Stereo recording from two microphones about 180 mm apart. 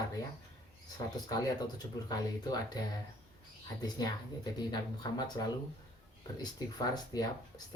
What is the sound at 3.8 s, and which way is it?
Speech, 20° left (ahead or behind).